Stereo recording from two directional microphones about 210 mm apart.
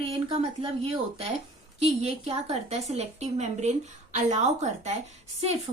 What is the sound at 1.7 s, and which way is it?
Speech, 30° right (ahead or behind).